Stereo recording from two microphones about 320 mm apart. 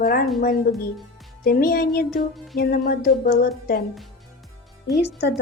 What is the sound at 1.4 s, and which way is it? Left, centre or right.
A woman's voice, left.